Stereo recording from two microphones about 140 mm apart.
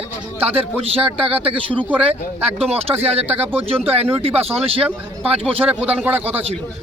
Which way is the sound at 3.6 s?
45° right (ahead or behind).